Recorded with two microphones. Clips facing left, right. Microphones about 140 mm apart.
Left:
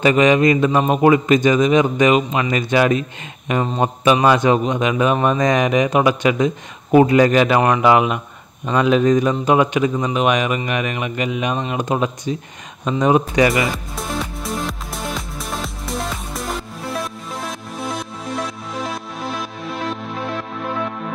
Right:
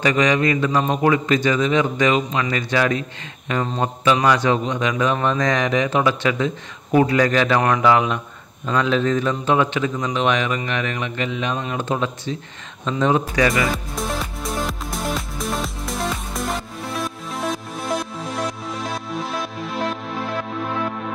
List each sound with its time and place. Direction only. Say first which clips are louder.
0.0 s a man's voice: left 5 dB; 20° left (ahead or behind)
13.5 s music: left 1 dB; centre (ahead or behind)